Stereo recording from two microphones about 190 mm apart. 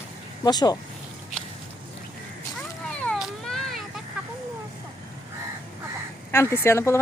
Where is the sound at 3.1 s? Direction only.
Centre (ahead or behind).